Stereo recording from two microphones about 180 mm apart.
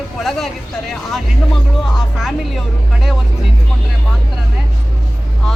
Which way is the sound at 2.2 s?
5° right (ahead or behind).